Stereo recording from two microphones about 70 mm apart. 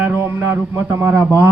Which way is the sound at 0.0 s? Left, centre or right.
Right.